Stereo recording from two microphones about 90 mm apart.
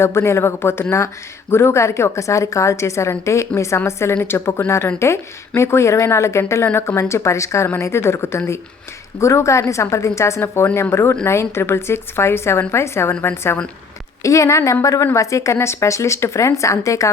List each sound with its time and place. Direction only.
0.0 s a woman's voice: 30° left (ahead or behind)
14.2 s a woman's voice: 35° left (ahead or behind)